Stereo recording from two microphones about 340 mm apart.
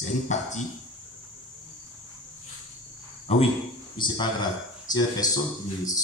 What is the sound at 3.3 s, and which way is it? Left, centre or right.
A man's voice, centre.